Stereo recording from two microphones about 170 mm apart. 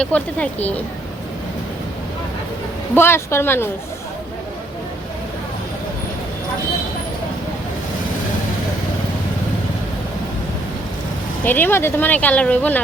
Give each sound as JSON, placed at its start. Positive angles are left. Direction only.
{"t": 0.0, "sound": "speech", "side_deg": 5}
{"t": 2.9, "sound": "speech", "side_deg": 15}
{"t": 11.4, "sound": "speech", "side_deg": 10}